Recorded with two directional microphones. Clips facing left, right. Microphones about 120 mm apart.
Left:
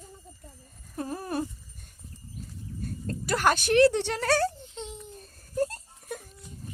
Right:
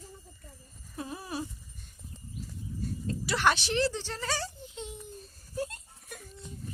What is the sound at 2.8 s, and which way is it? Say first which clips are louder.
Speech: even; 50° left (ahead or behind).